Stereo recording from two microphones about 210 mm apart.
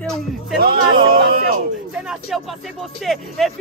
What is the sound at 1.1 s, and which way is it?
Speech, 45° right (ahead or behind).